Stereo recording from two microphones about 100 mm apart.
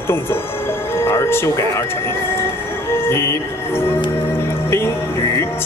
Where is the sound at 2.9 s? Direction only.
25° left (ahead or behind).